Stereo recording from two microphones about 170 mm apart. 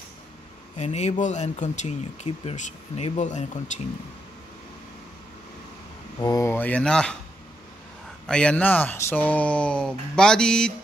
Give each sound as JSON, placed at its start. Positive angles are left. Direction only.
{"t": 0.7, "sound": "speech", "side_deg": 40}
{"t": 6.1, "sound": "speech", "side_deg": 20}
{"t": 8.3, "sound": "speech", "side_deg": 5}